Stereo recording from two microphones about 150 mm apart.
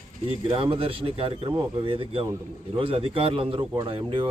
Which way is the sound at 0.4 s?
35° right (ahead or behind).